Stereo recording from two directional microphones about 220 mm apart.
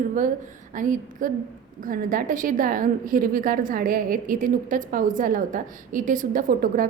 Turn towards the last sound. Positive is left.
turn(degrees=-40)  # may be behind; listen again after turning